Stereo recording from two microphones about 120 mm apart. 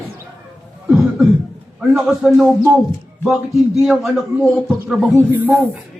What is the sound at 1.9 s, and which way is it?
Speech, 5° right (ahead or behind).